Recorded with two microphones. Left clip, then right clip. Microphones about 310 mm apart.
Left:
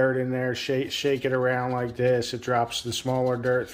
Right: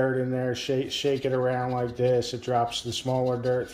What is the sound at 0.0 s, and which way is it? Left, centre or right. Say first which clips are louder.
Speech: left 2 dB; centre.